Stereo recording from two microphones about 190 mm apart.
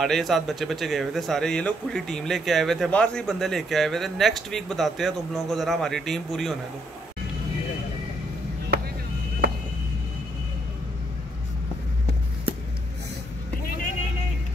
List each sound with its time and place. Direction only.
0.0 s speech: centre (ahead or behind)
8.7 s vehicle: 55° right (ahead or behind)
9.4 s a sound: 55° right (ahead or behind)